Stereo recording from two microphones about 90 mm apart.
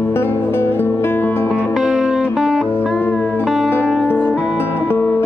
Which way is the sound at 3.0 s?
15° left (ahead or behind).